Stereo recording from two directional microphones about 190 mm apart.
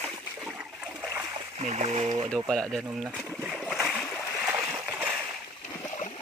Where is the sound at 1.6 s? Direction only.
35° right (ahead or behind).